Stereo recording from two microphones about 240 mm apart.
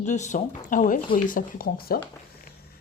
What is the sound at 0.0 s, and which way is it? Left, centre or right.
Speech, left.